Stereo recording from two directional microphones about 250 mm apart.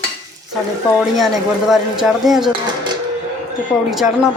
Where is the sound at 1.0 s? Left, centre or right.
Centre.